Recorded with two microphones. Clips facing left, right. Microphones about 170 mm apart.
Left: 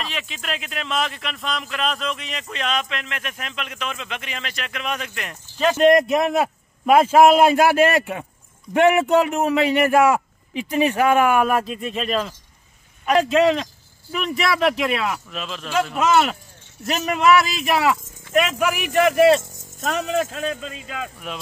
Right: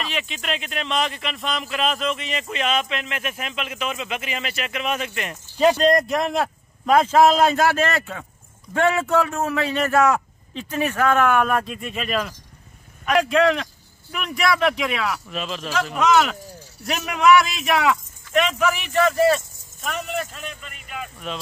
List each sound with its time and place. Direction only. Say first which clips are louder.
0.0 s speech: right 2 dB; centre (ahead or behind)
5.8 s speech: left 4 dB; 20° left (ahead or behind)
6.1 s a man's voice: left 3 dB; 5° left (ahead or behind)
20.0 s speech: left 7 dB; 90° left